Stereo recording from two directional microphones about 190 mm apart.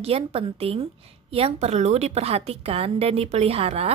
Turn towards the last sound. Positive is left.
turn(degrees=-30)  # may be behind; listen again after turning